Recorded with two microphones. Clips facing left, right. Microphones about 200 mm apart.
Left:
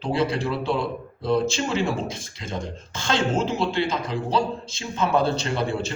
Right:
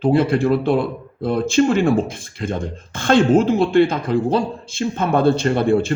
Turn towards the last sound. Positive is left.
turn(degrees=-55)  # may be behind; listen again after turning